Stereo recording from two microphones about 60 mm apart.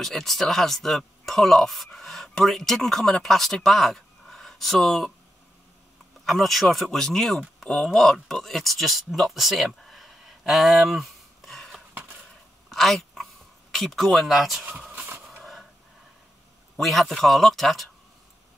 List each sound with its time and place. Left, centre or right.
0.0 s speech: centre
6.2 s speech: centre
14.8 s vehicle: right
16.8 s speech: centre